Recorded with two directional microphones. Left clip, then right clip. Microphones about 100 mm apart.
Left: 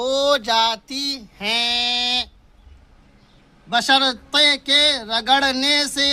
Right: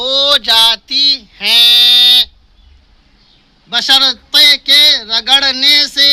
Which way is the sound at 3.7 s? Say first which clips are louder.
Right 7 dB; 40° left (ahead or behind).